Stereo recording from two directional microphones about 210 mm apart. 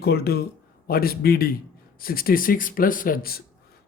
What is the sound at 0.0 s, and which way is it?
A man's voice, 50° left (ahead or behind).